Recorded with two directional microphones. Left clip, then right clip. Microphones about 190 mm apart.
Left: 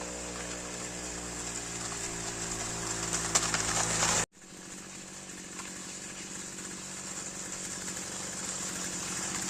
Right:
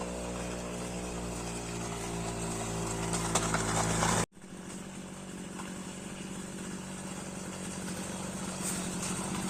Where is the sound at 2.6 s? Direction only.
25° left (ahead or behind).